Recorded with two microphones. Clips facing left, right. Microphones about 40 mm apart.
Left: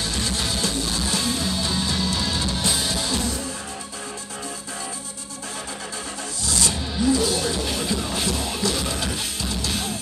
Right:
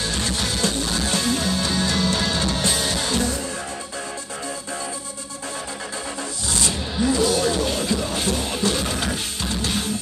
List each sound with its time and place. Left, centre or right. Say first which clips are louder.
0.0 s music: right 1 dB; right
6.4 s music: even; right